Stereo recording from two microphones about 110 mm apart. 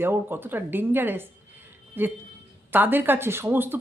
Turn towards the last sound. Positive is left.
turn(degrees=-20)  # may be behind; listen again after turning